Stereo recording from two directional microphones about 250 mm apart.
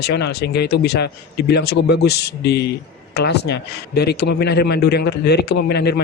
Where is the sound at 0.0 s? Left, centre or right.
Left.